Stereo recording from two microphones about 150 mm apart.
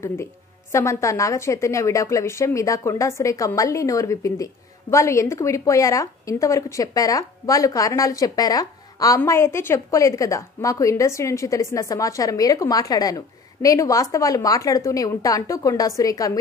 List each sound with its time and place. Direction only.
0.0 s speech: 20° left (ahead or behind)